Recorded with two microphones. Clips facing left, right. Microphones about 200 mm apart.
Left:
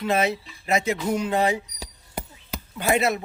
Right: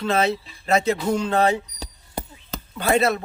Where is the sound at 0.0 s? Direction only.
15° left (ahead or behind).